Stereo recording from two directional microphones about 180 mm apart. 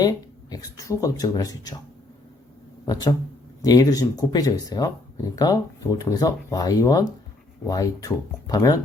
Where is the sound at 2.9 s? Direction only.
20° left (ahead or behind).